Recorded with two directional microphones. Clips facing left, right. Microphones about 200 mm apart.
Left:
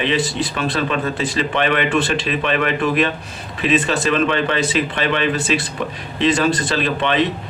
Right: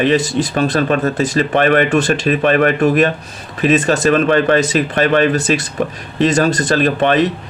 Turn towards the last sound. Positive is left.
turn(degrees=-45)  # may be behind; listen again after turning